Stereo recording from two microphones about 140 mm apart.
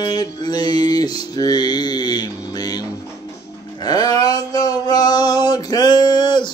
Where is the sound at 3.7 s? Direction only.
30° left (ahead or behind).